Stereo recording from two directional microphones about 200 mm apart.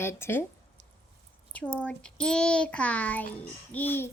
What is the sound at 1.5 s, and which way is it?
A child's voice, 5° left (ahead or behind).